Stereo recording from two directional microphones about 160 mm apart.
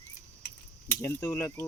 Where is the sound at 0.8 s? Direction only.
15° left (ahead or behind).